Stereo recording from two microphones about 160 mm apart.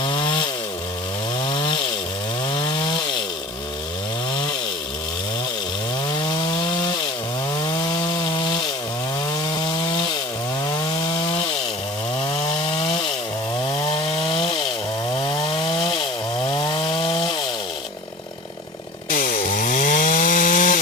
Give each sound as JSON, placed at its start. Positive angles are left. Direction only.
{"t": 0.0, "sound": "chainsaw", "side_deg": 30}
{"t": 1.5, "sound": "chainsaw", "side_deg": 30}
{"t": 7.6, "sound": "wood", "side_deg": 25}
{"t": 12.4, "sound": "chainsaw", "side_deg": 40}
{"t": 19.1, "sound": "chainsaw", "side_deg": 60}